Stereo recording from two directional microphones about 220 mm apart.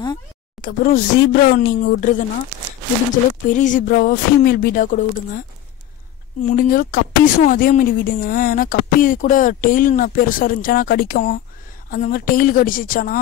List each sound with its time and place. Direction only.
0.6 s speech: 40° left (ahead or behind)
3.4 s speech: 35° left (ahead or behind)
6.4 s speech: 40° left (ahead or behind)